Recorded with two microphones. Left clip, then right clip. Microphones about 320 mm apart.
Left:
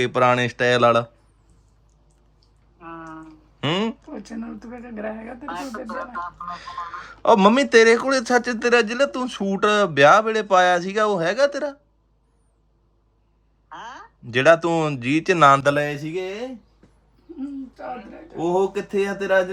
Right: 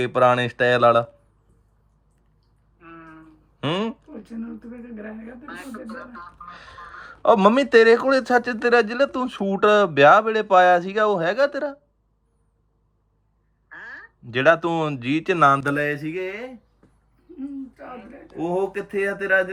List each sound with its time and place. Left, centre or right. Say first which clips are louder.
0.0 s speech: even; centre
3.6 s a sound: left 2 dB; centre
5.2 s speech: left 6 dB; centre
6.4 s speech: left 8 dB; centre
14.3 s speech: left 2 dB; centre
18.3 s speech: left 3 dB; centre